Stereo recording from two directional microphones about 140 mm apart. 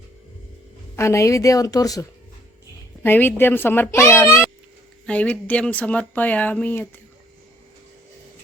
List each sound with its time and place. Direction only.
0.9 s speech: 20° left (ahead or behind)
3.0 s speech: 15° left (ahead or behind)